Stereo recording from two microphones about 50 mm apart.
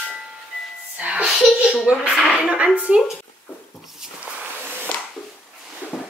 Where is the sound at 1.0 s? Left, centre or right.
Right.